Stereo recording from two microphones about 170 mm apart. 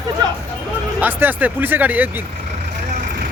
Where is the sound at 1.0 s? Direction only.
10° right (ahead or behind).